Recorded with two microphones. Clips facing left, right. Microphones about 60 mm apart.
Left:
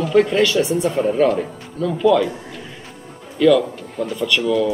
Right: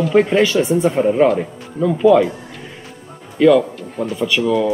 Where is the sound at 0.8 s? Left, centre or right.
Centre.